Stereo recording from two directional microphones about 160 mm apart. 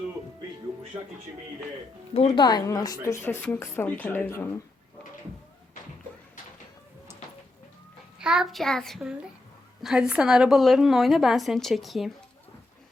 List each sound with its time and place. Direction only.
2.1 s speech: 40° left (ahead or behind)
2.4 s speech: 25° left (ahead or behind)
8.2 s a woman's voice: 5° right (ahead or behind)